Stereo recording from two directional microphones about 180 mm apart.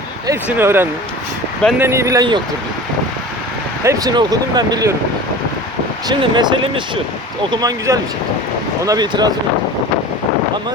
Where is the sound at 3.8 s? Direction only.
20° right (ahead or behind).